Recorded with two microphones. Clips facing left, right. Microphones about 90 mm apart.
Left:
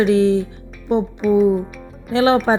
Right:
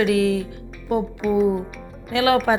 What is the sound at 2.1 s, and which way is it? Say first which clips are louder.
Speech: left 3 dB; 30° left (ahead or behind).